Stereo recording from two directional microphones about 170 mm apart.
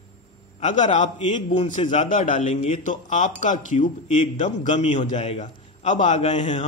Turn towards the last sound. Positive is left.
turn(degrees=30)  # may be behind; listen again after turning